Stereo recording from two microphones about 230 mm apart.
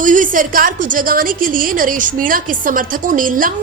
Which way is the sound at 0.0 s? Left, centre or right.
Right.